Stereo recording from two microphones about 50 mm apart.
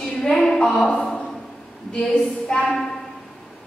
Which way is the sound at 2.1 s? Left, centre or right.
Centre.